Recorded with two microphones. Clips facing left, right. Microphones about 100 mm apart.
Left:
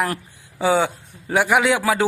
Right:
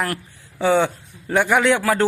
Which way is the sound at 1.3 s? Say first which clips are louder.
Right 1 dB; 10° left (ahead or behind).